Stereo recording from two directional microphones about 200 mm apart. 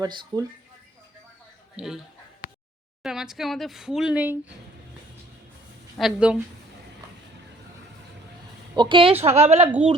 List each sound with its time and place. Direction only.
0.0 s speech: 20° right (ahead or behind)
1.7 s a man's voice: centre (ahead or behind)
3.0 s speech: 5° right (ahead or behind)
6.0 s speech: 5° right (ahead or behind)
8.7 s a woman's voice: 25° right (ahead or behind)